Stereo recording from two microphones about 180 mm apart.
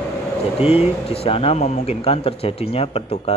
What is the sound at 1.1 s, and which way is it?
Speech, 35° left (ahead or behind).